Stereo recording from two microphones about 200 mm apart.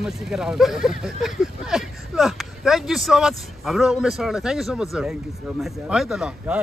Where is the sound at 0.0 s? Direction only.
Centre (ahead or behind).